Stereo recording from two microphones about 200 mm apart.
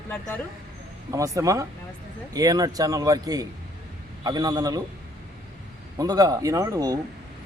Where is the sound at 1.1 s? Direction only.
15° right (ahead or behind).